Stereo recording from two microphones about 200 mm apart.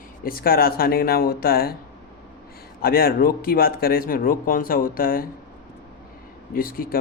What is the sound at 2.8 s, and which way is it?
Speech, 50° left (ahead or behind).